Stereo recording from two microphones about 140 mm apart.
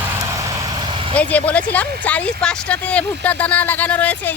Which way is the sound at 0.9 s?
40° right (ahead or behind).